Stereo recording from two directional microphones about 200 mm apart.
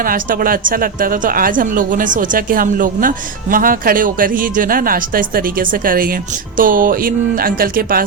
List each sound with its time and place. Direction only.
0.0 s a woman's voice: 45° right (ahead or behind)